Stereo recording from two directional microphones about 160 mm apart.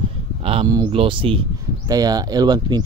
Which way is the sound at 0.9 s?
35° right (ahead or behind).